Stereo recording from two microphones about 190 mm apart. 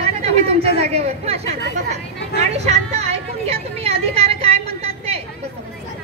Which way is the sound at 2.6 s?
35° right (ahead or behind).